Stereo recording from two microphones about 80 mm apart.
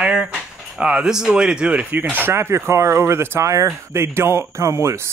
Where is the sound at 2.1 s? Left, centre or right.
Right.